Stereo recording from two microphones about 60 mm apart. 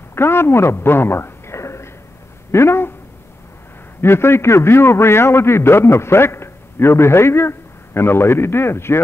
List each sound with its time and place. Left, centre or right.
0.1 s a sound: left
2.5 s a man's voice: left
4.0 s a man's voice: left